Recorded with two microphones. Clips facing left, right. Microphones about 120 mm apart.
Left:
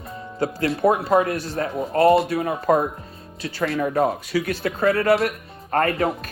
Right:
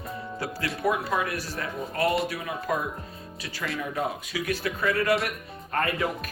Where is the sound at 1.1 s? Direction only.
45° left (ahead or behind).